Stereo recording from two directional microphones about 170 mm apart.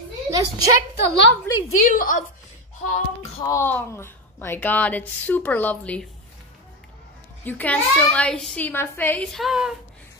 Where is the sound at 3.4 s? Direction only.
15° left (ahead or behind).